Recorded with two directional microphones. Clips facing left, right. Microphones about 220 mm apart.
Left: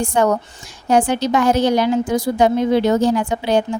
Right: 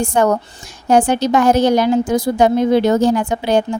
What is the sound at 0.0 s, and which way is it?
A woman's voice, 45° right (ahead or behind).